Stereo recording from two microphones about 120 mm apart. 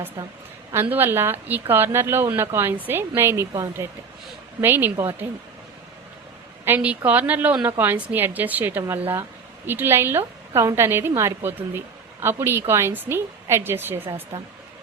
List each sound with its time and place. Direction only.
0.2 s speech: 30° right (ahead or behind)
0.7 s speech: 20° right (ahead or behind)
6.7 s a woman's voice: 15° right (ahead or behind)